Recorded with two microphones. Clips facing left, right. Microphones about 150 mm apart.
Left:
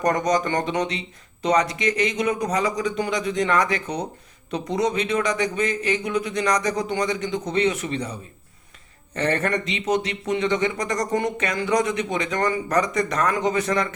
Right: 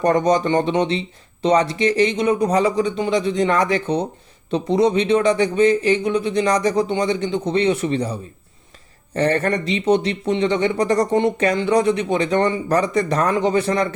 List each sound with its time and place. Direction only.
0.0 s speech: 30° right (ahead or behind)